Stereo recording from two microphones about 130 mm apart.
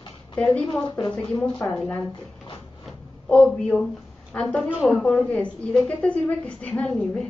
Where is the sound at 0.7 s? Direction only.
35° left (ahead or behind).